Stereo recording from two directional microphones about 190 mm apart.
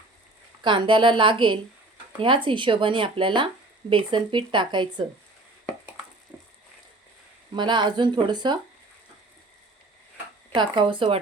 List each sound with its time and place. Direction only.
0.6 s speech: 25° right (ahead or behind)
7.5 s speech: 25° right (ahead or behind)
10.5 s speech: 25° right (ahead or behind)